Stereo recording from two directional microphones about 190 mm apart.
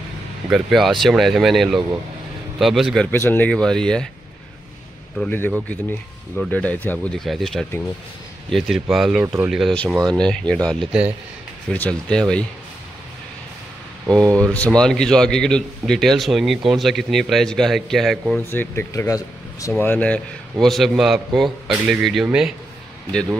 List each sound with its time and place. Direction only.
0.5 s speech: centre (ahead or behind)
3.1 s speech: 10° left (ahead or behind)
5.1 s speech: 5° left (ahead or behind)
11.7 s speech: 5° left (ahead or behind)
14.2 s speech: 15° right (ahead or behind)
14.5 s speech: 5° left (ahead or behind)
18.4 s speech: 10° left (ahead or behind)